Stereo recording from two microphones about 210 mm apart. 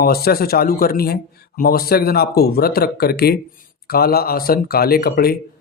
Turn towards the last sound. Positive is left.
turn(degrees=45)  # may be behind; listen again after turning